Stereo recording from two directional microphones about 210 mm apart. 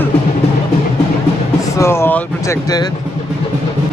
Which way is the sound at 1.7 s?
10° left (ahead or behind).